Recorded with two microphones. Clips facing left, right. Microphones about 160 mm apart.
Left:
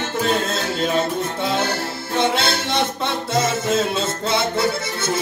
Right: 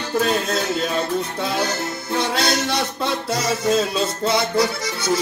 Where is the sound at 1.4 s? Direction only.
25° left (ahead or behind).